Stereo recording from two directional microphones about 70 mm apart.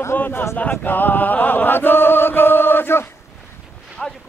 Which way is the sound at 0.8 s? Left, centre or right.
Left.